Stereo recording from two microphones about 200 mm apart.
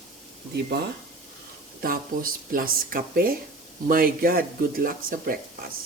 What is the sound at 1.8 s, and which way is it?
Speech, 45° right (ahead or behind).